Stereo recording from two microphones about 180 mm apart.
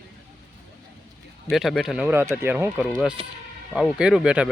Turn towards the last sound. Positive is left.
turn(degrees=-5)  # may be behind; listen again after turning